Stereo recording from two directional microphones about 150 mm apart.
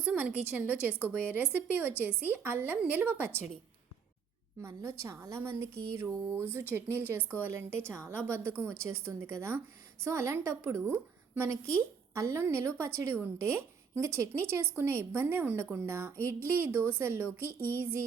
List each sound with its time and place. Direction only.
0.0 s a woman's voice: 10° right (ahead or behind)
4.6 s a woman's voice: 20° right (ahead or behind)